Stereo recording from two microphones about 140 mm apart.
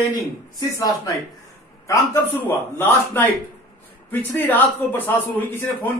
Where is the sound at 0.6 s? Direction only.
30° left (ahead or behind).